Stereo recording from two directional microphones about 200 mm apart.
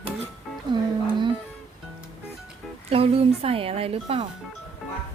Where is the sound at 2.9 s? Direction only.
30° right (ahead or behind).